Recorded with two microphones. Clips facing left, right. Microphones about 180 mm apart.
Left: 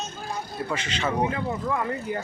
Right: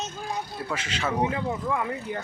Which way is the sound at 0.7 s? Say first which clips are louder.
Left 1 dB; 5° right (ahead or behind).